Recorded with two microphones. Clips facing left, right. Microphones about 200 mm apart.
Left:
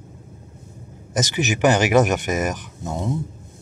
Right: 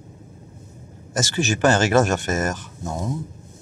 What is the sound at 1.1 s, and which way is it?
Speech, 20° left (ahead or behind).